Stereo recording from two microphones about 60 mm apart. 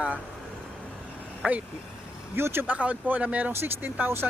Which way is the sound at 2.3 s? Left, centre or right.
Right.